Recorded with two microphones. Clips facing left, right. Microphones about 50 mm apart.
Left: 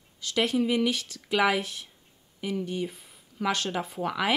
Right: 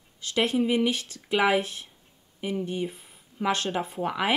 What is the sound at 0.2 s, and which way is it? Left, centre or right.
Speech, right.